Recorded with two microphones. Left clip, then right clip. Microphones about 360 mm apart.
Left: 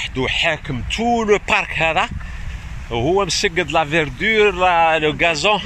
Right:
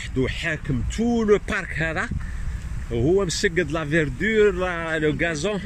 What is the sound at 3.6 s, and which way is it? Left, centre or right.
Speech, centre.